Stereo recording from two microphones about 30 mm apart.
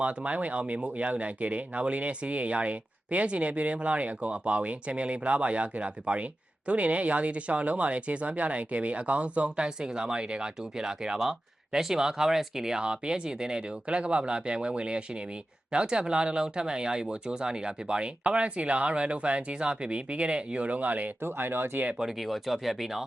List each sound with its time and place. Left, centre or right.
0.0 s speech: right
9.6 s speech: right
10.4 s speech: right
12.8 s speech: right
13.8 s speech: right
20.7 s speech: right
22.2 s speech: centre